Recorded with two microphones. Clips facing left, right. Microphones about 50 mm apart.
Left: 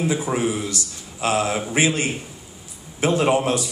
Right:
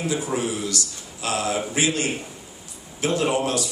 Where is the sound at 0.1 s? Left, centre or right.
Left.